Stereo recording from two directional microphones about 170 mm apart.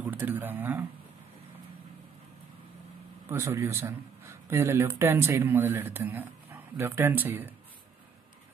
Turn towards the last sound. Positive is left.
turn(degrees=-10)  # may be behind; listen again after turning